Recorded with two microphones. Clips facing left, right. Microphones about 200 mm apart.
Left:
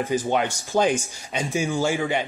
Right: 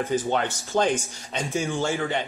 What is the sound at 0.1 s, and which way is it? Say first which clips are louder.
Speech: left 3 dB; 10° left (ahead or behind).